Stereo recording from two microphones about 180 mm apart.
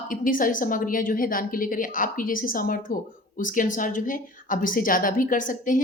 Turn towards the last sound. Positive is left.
turn(degrees=45)  # may be behind; listen again after turning